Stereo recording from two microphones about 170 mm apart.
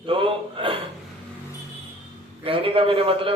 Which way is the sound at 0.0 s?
30° right (ahead or behind).